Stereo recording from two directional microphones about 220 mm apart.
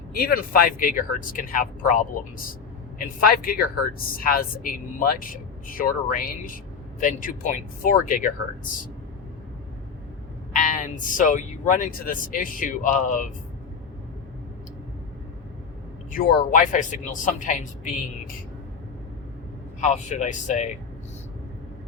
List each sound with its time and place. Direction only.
0.2 s speech: 40° left (ahead or behind)
3.2 s speech: 40° left (ahead or behind)
10.5 s speech: 35° left (ahead or behind)
16.5 s speech: 35° left (ahead or behind)
19.8 s speech: 35° left (ahead or behind)